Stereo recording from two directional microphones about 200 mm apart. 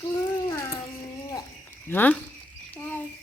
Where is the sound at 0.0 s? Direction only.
15° left (ahead or behind).